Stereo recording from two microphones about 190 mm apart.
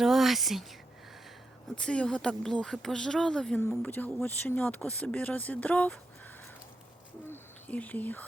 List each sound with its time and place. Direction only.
0.0 s a woman's voice: centre (ahead or behind)
1.7 s speech: 5° left (ahead or behind)
7.3 s speech: 10° left (ahead or behind)